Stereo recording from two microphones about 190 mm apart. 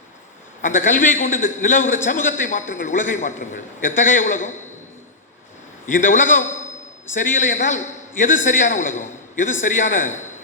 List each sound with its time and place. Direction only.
0.6 s a man's voice: 45° left (ahead or behind)
5.8 s a man's voice: 45° left (ahead or behind)